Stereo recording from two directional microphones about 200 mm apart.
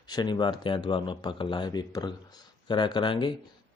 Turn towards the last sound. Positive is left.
turn(degrees=25)  # may be behind; listen again after turning